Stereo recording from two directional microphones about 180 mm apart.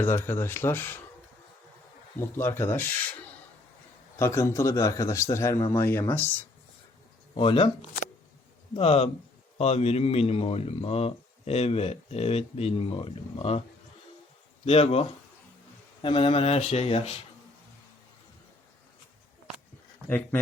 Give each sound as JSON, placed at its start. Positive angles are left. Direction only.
{"t": 0.0, "sound": "a man's voice", "side_deg": 10}
{"t": 2.1, "sound": "a man's voice", "side_deg": 15}
{"t": 4.2, "sound": "a man's voice", "side_deg": 15}
{"t": 7.3, "sound": "a man's voice", "side_deg": 30}
{"t": 8.7, "sound": "a man's voice", "side_deg": 35}
{"t": 14.6, "sound": "a man's voice", "side_deg": 35}
{"t": 20.1, "sound": "a man's voice", "side_deg": 10}